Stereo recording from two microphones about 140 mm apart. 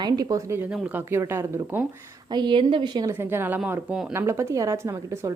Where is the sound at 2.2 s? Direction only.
35° right (ahead or behind).